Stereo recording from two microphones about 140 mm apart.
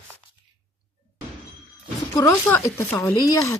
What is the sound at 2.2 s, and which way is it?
Speech, 15° left (ahead or behind).